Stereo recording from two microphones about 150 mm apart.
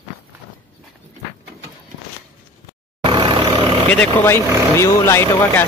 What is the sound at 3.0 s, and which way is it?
Vehicle, 30° right (ahead or behind).